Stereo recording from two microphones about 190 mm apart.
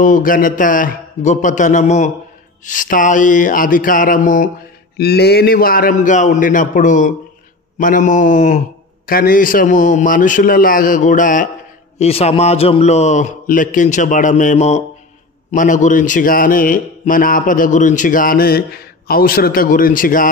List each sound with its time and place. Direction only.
0.0 s a man's voice: 45° left (ahead or behind)
4.9 s a man's voice: 55° left (ahead or behind)
12.0 s a man's voice: 35° left (ahead or behind)